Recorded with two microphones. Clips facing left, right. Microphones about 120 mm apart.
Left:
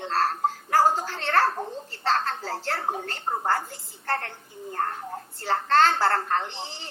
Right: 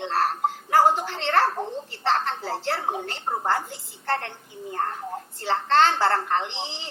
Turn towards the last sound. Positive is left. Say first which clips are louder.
# right 1 dB
turn(degrees=-15)  # may be behind; listen again after turning